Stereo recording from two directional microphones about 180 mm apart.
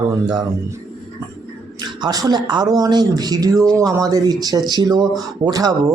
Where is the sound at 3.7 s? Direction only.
5° left (ahead or behind).